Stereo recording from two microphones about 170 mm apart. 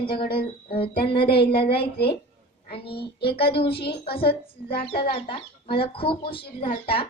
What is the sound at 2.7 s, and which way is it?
Speech, 30° left (ahead or behind).